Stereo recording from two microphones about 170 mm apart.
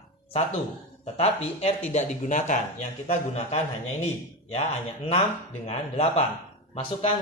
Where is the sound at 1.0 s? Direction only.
40° left (ahead or behind).